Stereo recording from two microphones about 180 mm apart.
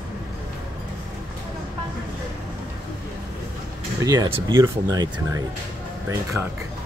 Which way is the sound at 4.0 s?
20° right (ahead or behind).